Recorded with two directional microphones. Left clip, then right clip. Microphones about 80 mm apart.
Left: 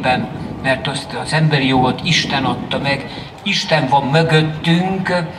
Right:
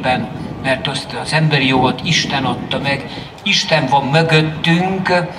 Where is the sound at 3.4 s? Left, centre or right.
Right.